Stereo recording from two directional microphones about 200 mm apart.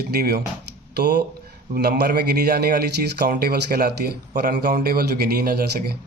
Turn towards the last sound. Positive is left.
turn(degrees=-50)  # may be behind; listen again after turning